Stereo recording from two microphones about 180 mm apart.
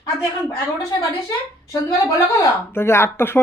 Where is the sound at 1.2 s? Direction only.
20° left (ahead or behind).